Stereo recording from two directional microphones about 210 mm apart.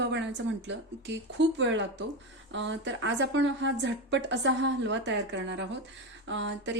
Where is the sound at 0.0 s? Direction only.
55° right (ahead or behind).